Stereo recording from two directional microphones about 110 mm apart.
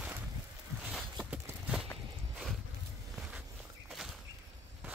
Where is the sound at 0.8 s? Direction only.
Centre (ahead or behind).